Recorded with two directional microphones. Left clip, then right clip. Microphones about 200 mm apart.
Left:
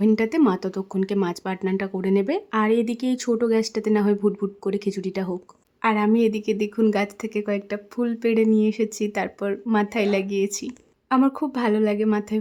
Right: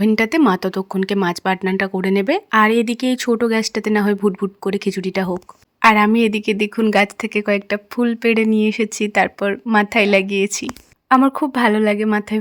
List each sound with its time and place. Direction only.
0.2 s speech: 15° right (ahead or behind)